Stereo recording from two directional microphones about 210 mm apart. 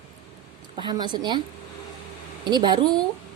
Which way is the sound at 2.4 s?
20° right (ahead or behind).